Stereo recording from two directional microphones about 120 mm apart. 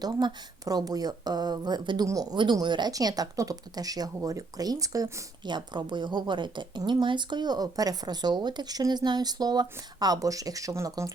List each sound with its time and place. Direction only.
0.0 s speech: 35° right (ahead or behind)
5.5 s speech: 40° right (ahead or behind)